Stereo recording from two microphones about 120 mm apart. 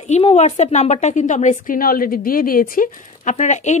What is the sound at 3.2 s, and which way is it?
Speech, 80° left.